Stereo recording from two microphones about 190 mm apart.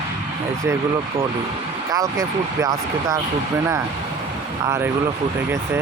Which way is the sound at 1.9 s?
20° right (ahead or behind).